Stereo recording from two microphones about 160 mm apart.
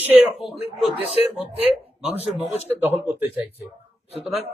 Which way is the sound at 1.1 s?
40° left (ahead or behind).